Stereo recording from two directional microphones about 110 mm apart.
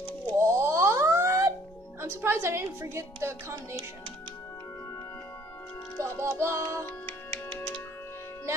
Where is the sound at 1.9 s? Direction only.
20° right (ahead or behind).